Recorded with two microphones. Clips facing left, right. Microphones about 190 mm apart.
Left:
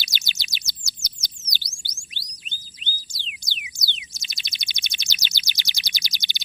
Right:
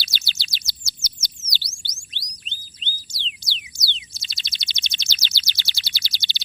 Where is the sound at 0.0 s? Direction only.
15° left (ahead or behind).